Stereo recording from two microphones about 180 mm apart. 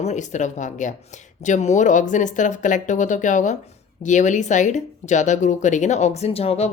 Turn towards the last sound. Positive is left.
turn(degrees=35)  # may be behind; listen again after turning